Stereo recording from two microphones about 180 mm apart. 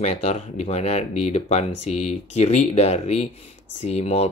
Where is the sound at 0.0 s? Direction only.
35° left (ahead or behind).